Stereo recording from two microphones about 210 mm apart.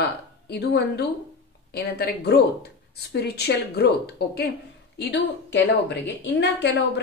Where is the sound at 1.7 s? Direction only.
50° left (ahead or behind).